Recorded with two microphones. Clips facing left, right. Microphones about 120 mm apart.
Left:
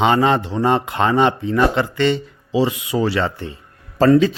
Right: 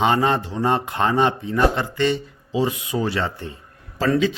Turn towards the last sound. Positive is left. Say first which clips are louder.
# left 6 dB
turn(degrees=40)  # may be behind; listen again after turning